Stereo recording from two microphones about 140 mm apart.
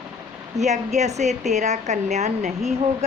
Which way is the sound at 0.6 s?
55° right (ahead or behind).